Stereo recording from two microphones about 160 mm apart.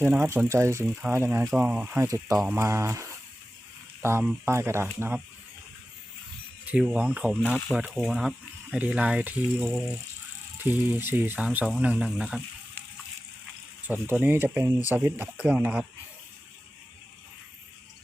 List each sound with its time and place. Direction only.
0.0 s speech: 15° right (ahead or behind)
2.0 s speech: 20° right (ahead or behind)
6.7 s speech: 5° right (ahead or behind)
13.8 s speech: 10° right (ahead or behind)